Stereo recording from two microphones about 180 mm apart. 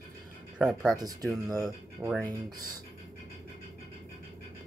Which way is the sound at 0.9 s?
20° right (ahead or behind).